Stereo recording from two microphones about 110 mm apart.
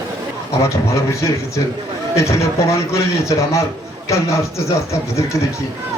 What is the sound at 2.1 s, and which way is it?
A man's voice, 25° left (ahead or behind).